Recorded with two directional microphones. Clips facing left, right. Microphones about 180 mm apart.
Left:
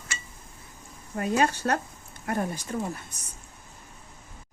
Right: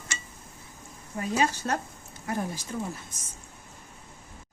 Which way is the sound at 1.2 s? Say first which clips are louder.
Left 2 dB; 60° left (ahead or behind).